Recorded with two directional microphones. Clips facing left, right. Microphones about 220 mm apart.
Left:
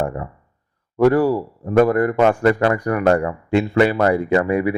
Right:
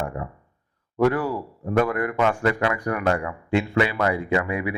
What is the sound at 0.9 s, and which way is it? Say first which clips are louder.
A man's voice: left 7 dB; 35° left (ahead or behind).